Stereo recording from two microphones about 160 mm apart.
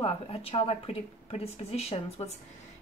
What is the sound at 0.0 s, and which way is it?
Speech, 35° left (ahead or behind).